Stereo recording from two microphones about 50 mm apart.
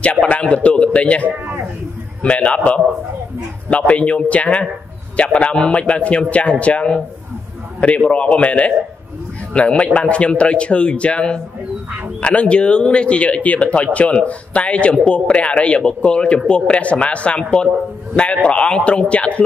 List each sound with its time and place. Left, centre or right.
0.0 s a man's voice: left
8.1 s a man's voice: left